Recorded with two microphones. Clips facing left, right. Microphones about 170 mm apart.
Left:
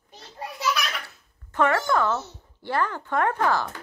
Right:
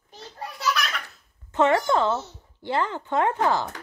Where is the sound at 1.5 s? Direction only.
25° right (ahead or behind).